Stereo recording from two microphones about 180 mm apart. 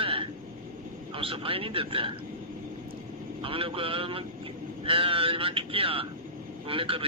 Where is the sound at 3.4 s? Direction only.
30° right (ahead or behind).